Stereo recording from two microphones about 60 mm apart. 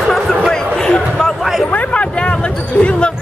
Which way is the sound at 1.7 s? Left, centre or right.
Left.